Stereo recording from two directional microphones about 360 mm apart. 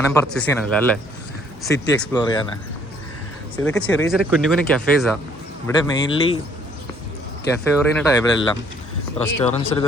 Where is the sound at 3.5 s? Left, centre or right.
Centre.